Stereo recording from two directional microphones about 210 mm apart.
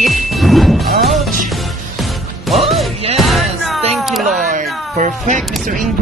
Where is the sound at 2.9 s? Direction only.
30° right (ahead or behind).